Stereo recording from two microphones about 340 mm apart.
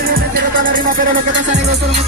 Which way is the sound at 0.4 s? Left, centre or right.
Right.